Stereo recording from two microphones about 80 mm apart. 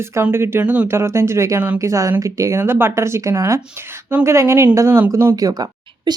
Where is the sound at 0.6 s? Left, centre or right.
Centre.